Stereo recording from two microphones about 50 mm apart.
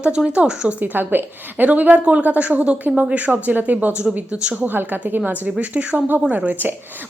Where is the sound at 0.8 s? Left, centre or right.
Right.